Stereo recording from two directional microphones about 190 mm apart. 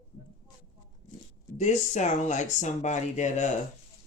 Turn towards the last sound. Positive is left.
turn(degrees=40)  # may be behind; listen again after turning